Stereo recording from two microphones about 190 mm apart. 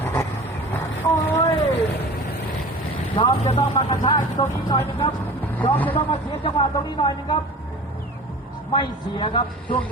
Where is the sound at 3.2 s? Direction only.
30° left (ahead or behind).